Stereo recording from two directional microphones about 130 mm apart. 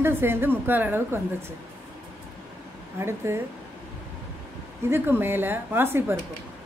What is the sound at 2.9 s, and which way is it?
Speech, 20° right (ahead or behind).